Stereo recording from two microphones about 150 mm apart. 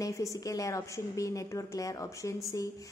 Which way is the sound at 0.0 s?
20° left (ahead or behind).